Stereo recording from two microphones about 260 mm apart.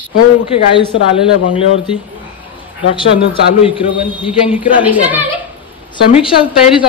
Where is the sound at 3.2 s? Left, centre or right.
Centre.